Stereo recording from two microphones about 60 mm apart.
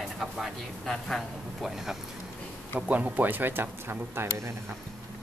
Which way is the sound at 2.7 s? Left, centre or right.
Right.